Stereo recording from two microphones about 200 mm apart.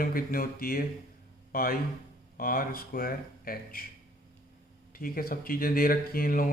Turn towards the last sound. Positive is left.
turn(degrees=45)  # may be behind; listen again after turning